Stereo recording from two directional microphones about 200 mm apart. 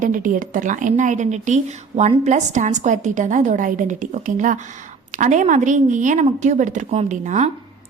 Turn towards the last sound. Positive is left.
turn(degrees=-35)  # may be behind; listen again after turning